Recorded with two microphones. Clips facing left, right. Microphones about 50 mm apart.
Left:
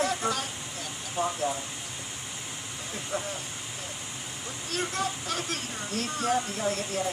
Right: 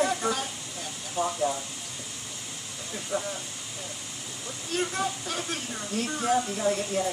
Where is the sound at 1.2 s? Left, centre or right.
Centre.